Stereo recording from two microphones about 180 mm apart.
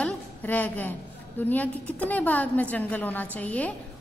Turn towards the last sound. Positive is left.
turn(degrees=10)  # may be behind; listen again after turning